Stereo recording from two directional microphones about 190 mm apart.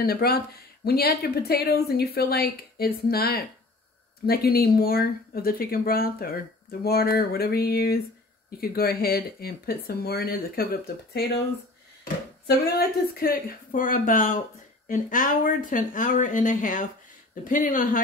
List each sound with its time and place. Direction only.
0.0 s a woman's voice: 55° left (ahead or behind)